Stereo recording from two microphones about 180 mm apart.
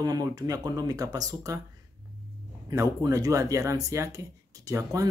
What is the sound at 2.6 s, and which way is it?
Speech, 15° right (ahead or behind).